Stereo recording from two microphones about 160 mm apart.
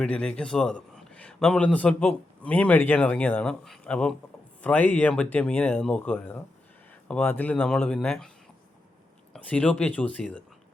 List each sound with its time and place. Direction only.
0.0 s a man's voice: 5° left (ahead or behind)
9.3 s a man's voice: 10° left (ahead or behind)